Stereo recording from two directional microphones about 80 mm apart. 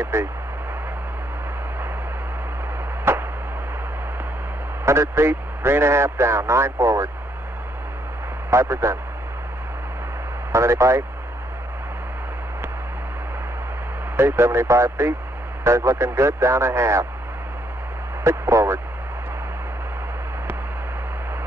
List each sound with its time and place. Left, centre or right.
0.0 s speech: right
3.1 s chop: right
4.8 s speech: right
8.5 s a man's voice: right
10.5 s speech: right
14.1 s speech: right
18.2 s speech: right